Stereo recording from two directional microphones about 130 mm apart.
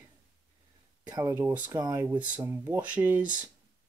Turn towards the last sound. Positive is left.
turn(degrees=-15)  # may be behind; listen again after turning